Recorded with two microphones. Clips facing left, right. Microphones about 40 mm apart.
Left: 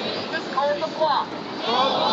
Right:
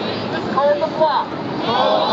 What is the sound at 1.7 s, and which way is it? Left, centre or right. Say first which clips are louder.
Speech: right 5 dB; centre.